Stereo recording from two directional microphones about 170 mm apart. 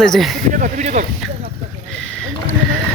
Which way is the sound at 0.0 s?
Centre (ahead or behind).